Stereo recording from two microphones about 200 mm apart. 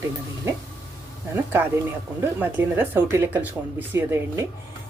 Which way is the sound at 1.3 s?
10° right (ahead or behind).